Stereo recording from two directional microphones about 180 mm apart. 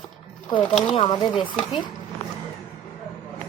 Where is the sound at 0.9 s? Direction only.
30° left (ahead or behind).